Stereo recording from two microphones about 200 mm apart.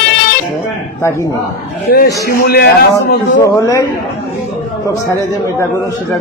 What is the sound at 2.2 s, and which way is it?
Speech, 50° left (ahead or behind).